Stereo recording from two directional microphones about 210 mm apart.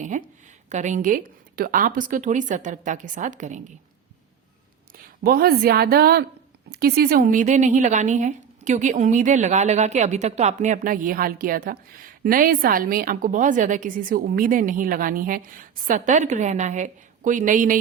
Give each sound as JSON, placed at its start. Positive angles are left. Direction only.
{"t": 0.1, "sound": "a woman's voice", "side_deg": -35}
{"t": 4.9, "sound": "a woman's voice", "side_deg": -45}